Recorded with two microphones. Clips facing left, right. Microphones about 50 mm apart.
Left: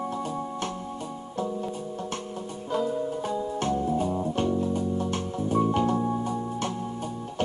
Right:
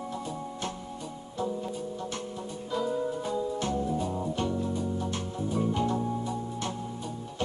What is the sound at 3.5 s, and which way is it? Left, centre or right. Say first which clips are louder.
Music: left 4 dB; left.